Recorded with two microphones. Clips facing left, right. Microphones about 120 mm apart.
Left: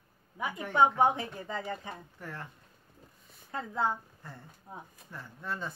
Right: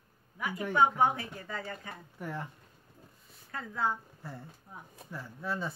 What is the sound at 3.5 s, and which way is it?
Speech, 25° left (ahead or behind).